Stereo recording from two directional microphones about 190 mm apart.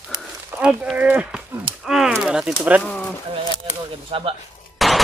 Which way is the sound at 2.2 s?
5° right (ahead or behind).